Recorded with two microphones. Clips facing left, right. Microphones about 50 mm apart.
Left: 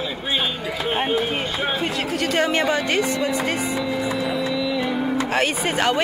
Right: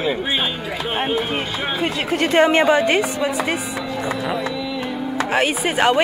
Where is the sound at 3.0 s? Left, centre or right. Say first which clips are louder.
Right 1 dB; centre.